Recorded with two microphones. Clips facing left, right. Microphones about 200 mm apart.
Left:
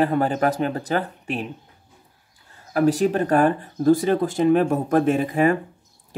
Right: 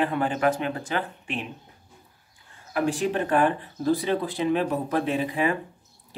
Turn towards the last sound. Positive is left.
turn(degrees=45)  # may be behind; listen again after turning